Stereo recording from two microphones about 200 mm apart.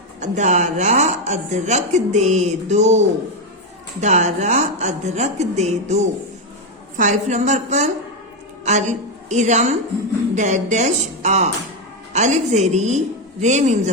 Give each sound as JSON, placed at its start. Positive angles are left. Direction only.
{"t": 0.2, "sound": "a woman's voice", "side_deg": -35}
{"t": 4.0, "sound": "a woman's voice", "side_deg": -35}